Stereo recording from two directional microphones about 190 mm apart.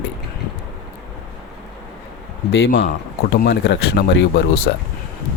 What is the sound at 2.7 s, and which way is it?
Speech, 65° left (ahead or behind).